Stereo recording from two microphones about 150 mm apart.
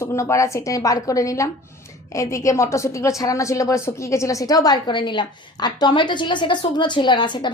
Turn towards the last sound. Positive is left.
turn(degrees=30)  # may be behind; listen again after turning